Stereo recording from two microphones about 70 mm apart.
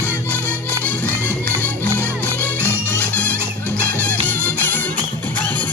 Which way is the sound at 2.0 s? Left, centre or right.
Left.